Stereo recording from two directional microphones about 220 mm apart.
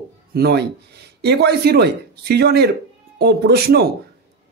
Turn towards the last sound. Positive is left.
turn(degrees=-50)  # may be behind; listen again after turning